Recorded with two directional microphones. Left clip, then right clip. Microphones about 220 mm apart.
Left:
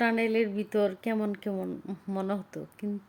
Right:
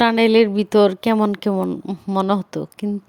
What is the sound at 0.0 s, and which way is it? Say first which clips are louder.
A woman's voice: right 12 dB; 40° right (ahead or behind).